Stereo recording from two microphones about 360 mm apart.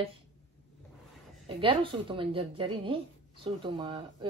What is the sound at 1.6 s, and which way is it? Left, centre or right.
A woman's voice, centre.